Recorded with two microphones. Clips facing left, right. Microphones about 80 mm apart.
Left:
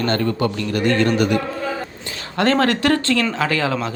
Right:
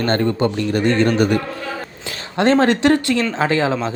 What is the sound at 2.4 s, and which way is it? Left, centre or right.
Speech, right.